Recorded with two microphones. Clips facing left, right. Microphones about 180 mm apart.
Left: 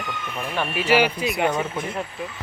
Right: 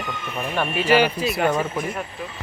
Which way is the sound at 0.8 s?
10° left (ahead or behind).